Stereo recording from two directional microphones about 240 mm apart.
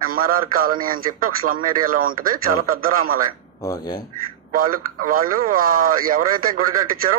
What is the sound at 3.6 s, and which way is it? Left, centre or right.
Speech, centre.